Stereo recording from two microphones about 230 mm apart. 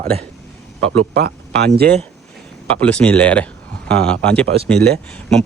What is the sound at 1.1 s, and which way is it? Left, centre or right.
Speech, right.